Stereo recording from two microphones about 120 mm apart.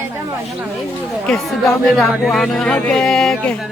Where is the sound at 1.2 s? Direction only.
Centre (ahead or behind).